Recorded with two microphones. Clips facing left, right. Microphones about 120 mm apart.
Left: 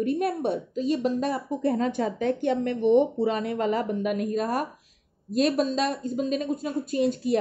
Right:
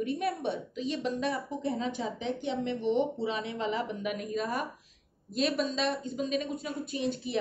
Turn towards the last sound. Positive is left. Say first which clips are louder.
# left 8 dB
turn(degrees=45)  # may be behind; listen again after turning